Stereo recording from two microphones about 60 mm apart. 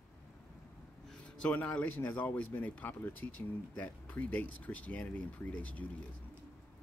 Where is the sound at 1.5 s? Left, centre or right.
Left.